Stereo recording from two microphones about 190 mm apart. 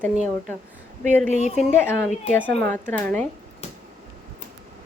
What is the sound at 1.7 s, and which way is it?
Speech, 15° left (ahead or behind).